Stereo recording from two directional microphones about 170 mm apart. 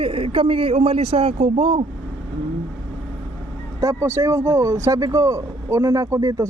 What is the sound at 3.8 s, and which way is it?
Speech, 15° right (ahead or behind).